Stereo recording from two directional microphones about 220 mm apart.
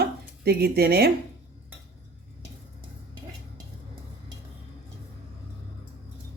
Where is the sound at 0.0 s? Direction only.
45° right (ahead or behind).